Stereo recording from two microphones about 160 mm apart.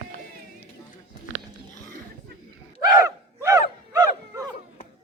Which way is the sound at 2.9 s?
20° right (ahead or behind).